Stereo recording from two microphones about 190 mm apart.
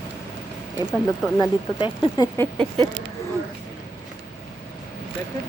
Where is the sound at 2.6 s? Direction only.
25° right (ahead or behind).